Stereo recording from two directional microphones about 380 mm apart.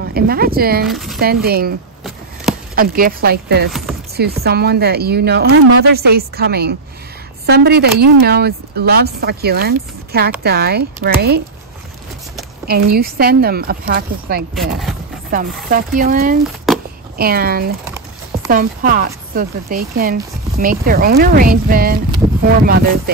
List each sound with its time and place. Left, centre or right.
0.0 s speech: right
0.8 s speech: centre
1.2 s speech: right
2.7 s speech: right
12.6 s speech: right
14.5 s speech: centre
15.3 s speech: right
16.7 s a sound: centre
17.2 s speech: right